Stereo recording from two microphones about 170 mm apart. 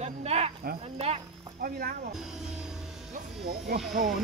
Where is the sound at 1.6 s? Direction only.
60° right (ahead or behind).